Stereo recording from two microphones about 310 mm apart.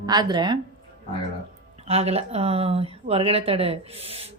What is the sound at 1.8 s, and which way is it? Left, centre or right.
Speech, centre.